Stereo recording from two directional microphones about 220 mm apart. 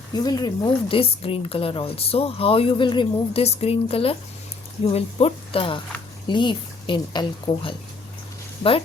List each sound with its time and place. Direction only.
0.2 s speech: 15° left (ahead or behind)